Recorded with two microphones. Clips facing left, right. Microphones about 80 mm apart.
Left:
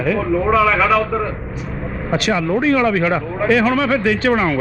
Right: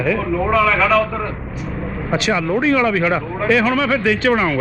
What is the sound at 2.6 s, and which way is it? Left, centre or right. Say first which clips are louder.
Speech: left 1 dB; left.